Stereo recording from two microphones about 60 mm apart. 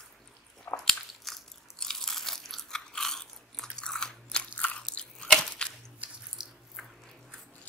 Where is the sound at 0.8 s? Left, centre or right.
Centre.